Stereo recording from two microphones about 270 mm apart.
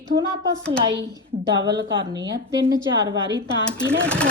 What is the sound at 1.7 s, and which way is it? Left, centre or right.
Speech, right.